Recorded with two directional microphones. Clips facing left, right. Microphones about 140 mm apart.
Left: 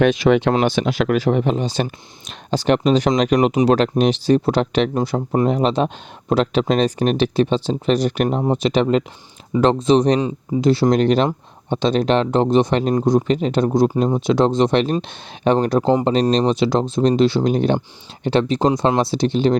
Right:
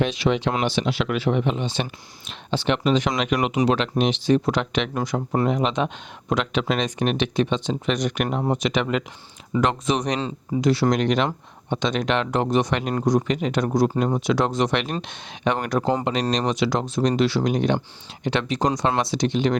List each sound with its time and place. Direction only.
0.0 s speech: 55° left (ahead or behind); by 19.5 s 30° left (ahead or behind)